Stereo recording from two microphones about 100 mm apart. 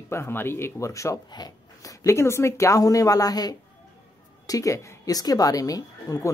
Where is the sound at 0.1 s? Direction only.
25° left (ahead or behind).